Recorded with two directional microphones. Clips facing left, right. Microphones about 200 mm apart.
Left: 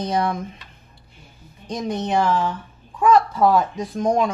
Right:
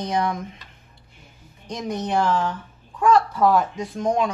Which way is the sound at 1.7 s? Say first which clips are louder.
Left 2 dB; 30° left (ahead or behind).